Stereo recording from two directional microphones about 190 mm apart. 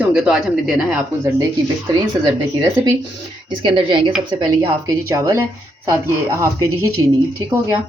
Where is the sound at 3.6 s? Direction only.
25° right (ahead or behind).